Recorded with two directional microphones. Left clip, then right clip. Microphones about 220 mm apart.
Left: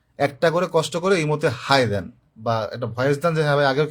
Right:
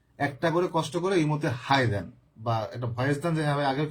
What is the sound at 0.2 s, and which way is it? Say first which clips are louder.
A man's voice: left 7 dB; 50° left (ahead or behind).